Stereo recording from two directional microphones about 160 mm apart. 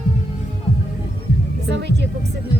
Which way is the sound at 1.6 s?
90° right.